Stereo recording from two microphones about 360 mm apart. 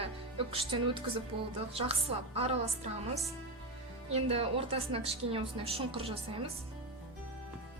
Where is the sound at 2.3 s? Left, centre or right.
Centre.